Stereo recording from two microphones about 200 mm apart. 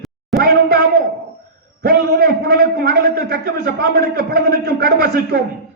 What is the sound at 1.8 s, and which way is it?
A man's voice, 55° right (ahead or behind).